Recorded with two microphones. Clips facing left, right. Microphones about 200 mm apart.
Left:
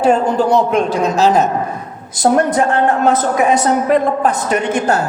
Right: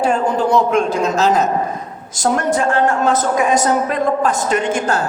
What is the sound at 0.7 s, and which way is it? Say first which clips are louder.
Speech: left 1 dB; centre (ahead or behind).